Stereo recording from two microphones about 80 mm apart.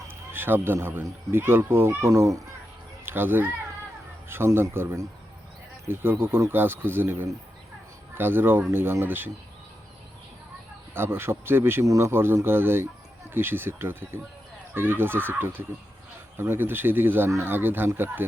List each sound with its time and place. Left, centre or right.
0.1 s speech: right
3.1 s speech: right
10.9 s speech: right